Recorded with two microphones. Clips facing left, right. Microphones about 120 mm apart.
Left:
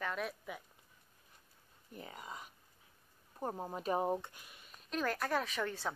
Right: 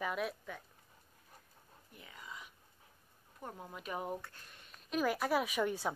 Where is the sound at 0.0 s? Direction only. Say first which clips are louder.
Right 2 dB; 5° right (ahead or behind).